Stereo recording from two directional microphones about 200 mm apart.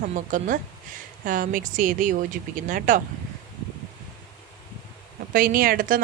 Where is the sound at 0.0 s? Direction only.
40° right (ahead or behind).